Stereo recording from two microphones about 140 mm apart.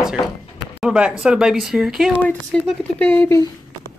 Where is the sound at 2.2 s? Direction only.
10° left (ahead or behind).